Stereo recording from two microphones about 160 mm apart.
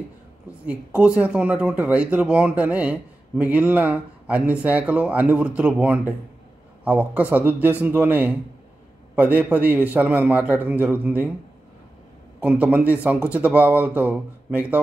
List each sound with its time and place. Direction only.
0.7 s speech: 5° right (ahead or behind)
12.4 s speech: 10° right (ahead or behind)